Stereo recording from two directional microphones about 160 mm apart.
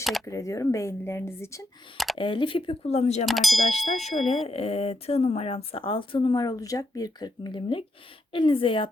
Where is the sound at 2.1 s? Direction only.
30° left (ahead or behind).